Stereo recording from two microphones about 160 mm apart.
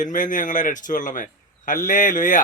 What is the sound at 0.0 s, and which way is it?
Speech, 55° left (ahead or behind).